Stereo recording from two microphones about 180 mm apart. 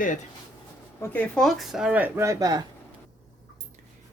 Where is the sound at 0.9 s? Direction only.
10° left (ahead or behind); by 2.6 s 20° right (ahead or behind).